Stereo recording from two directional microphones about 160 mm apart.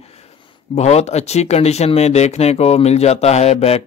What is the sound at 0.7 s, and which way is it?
Speech, 45° left (ahead or behind).